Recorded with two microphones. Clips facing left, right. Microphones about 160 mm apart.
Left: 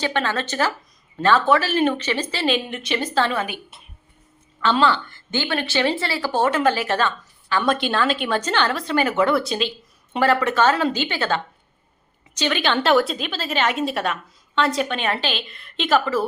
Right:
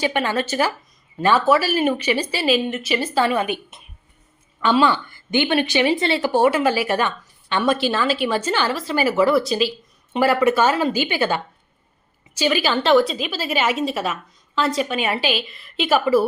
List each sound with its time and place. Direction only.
0.0 s a woman's voice: 10° right (ahead or behind)
3.4 s a woman's voice: 20° right (ahead or behind)